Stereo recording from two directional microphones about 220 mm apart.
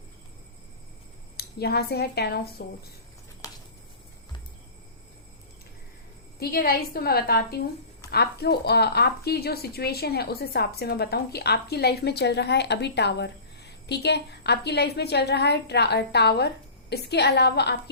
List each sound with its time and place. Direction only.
1.4 s speech: 45° left (ahead or behind)
3.4 s a sound: 15° left (ahead or behind)
6.4 s speech: 45° left (ahead or behind)